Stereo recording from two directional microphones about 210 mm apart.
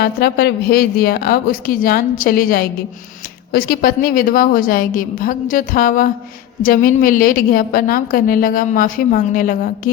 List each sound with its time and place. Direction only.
0.0 s a woman's voice: 50° left (ahead or behind)